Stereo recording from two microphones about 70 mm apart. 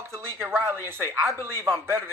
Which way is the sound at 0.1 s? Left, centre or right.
Right.